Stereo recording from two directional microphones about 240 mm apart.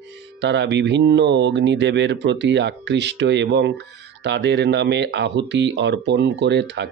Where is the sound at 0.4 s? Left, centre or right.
Right.